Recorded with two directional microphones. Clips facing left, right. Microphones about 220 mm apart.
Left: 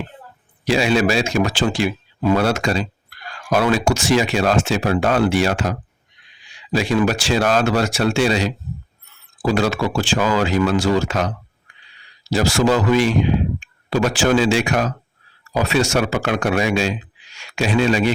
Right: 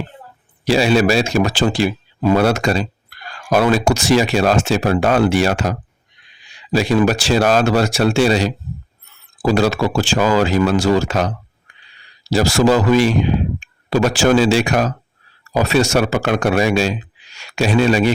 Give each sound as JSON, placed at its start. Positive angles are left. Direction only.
{"t": 0.7, "sound": "speech", "side_deg": -35}
{"t": 6.7, "sound": "speech", "side_deg": -40}
{"t": 12.3, "sound": "speech", "side_deg": -40}